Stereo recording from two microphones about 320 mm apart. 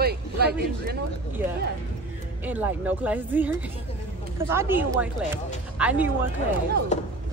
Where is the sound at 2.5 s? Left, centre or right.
Centre.